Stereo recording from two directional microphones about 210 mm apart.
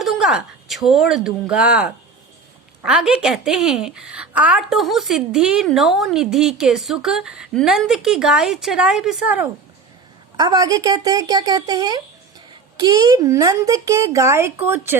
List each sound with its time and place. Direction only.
0.0 s a woman's voice: centre (ahead or behind)
10.3 s speech: 20° right (ahead or behind)